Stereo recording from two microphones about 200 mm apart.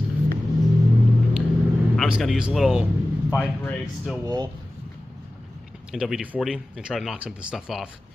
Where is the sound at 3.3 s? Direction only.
10° left (ahead or behind).